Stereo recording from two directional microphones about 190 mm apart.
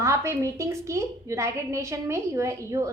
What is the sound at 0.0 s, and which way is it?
A woman's voice, 15° right (ahead or behind).